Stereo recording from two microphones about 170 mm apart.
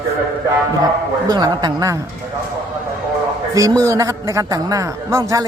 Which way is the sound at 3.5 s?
20° right (ahead or behind).